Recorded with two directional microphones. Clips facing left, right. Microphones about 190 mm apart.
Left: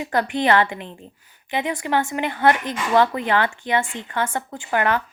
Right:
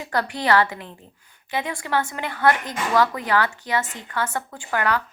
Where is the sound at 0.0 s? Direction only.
20° left (ahead or behind).